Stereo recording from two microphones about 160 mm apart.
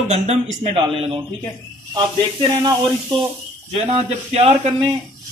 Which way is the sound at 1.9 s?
30° right (ahead or behind).